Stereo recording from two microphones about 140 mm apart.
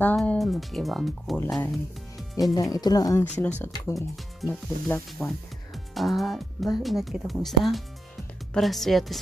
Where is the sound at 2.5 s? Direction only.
30° left (ahead or behind).